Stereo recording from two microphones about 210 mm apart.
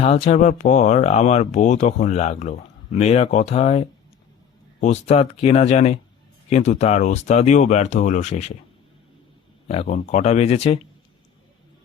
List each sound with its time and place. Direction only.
0.0 s speech: 30° left (ahead or behind)
9.6 s speech: 30° left (ahead or behind)